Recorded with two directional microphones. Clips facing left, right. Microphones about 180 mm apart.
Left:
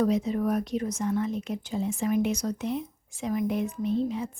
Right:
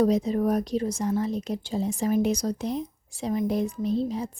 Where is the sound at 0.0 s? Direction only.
35° right (ahead or behind).